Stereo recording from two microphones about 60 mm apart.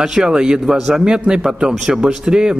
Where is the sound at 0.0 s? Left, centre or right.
Centre.